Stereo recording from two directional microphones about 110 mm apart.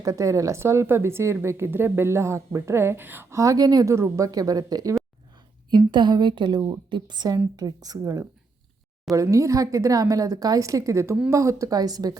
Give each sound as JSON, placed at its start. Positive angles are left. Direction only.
{"t": 0.0, "sound": "a woman's voice", "side_deg": -30}